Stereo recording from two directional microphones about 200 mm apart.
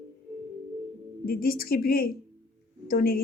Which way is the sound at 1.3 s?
45° left (ahead or behind).